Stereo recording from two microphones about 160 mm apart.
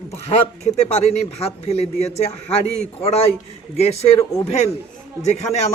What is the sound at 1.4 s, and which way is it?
Speech, 40° left (ahead or behind).